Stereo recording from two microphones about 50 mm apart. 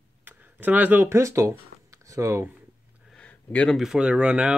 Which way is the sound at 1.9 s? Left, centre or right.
Right.